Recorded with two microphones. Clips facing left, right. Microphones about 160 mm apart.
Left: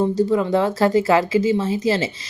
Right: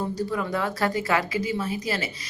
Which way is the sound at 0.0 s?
25° left (ahead or behind).